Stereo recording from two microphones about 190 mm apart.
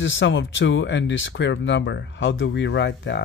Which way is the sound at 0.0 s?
75° left (ahead or behind).